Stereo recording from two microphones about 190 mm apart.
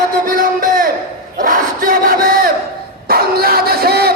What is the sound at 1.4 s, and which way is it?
Battle cry, 45° right (ahead or behind).